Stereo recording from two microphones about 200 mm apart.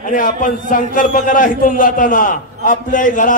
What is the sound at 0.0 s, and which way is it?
A man's voice, 40° left (ahead or behind).